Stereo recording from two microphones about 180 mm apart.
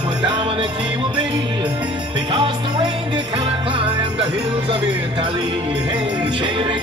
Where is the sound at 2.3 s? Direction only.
25° right (ahead or behind).